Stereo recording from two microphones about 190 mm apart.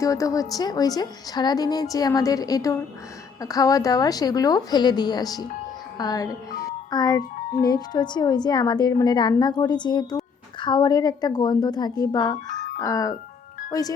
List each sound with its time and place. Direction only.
0.0 s a woman's voice: 15° left (ahead or behind)